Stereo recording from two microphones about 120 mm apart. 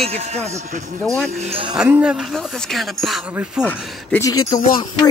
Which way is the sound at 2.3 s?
Centre (ahead or behind).